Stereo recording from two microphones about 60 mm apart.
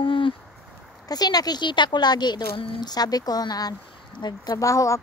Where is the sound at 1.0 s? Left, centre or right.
Left.